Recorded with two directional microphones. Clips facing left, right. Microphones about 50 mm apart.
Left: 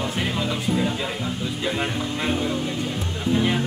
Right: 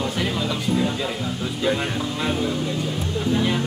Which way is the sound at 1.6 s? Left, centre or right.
Centre.